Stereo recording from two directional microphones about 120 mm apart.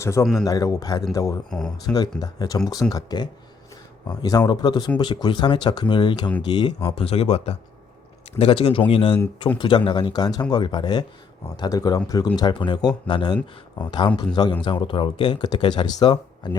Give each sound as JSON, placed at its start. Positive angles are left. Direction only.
{"t": 0.0, "sound": "a man's voice", "side_deg": 25}
{"t": 1.5, "sound": "speech", "side_deg": 5}
{"t": 2.2, "sound": "speech", "side_deg": 30}
{"t": 6.9, "sound": "speech", "side_deg": 55}
{"t": 8.4, "sound": "speech", "side_deg": 50}
{"t": 9.6, "sound": "speech", "side_deg": 40}